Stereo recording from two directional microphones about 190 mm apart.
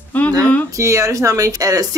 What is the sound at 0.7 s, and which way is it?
Speech, 15° right (ahead or behind).